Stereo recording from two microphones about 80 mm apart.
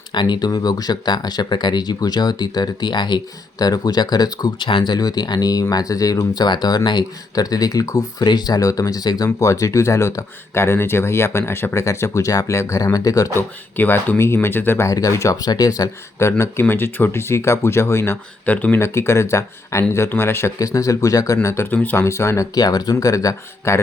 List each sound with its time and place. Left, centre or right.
0.1 s speech: left
3.6 s speech: left
8.3 s speech: left
13.3 s speech: left
14.8 s speech: left
16.1 s speech: left
18.4 s speech: left
18.8 s speech: left
20.6 s speech: left
21.7 s speech: left
22.0 s speech: left
22.5 s speech: left